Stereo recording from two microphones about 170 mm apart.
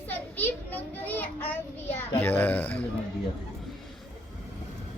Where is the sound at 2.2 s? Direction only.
10° left (ahead or behind).